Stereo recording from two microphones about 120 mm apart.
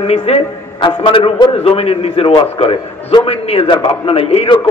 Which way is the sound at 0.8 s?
45° left (ahead or behind).